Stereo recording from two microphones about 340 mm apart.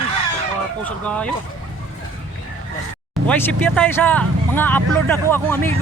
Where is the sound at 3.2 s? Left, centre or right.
Centre.